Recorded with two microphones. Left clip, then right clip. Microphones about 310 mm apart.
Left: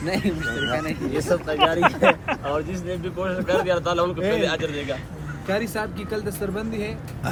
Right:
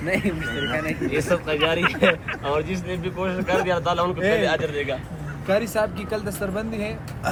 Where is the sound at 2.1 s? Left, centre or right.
Centre.